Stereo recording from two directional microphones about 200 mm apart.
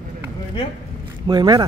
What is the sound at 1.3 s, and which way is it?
Speech, 20° right (ahead or behind).